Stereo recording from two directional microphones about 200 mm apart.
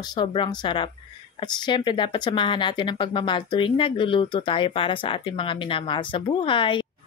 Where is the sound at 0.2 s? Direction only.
25° left (ahead or behind).